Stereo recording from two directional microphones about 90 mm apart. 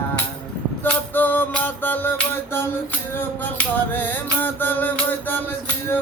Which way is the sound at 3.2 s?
20° left (ahead or behind).